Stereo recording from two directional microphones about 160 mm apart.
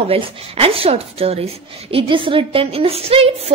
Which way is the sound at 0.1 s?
35° right (ahead or behind).